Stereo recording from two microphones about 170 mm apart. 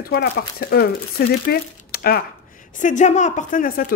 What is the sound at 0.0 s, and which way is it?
Speech, 65° left (ahead or behind).